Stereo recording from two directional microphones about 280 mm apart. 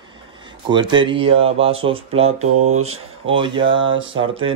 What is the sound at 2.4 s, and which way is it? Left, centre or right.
Speech, right.